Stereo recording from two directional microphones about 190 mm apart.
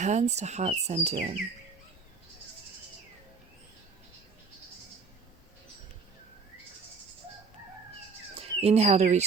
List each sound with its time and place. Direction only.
0.0 s speech: 35° right (ahead or behind)
8.6 s speech: 35° right (ahead or behind)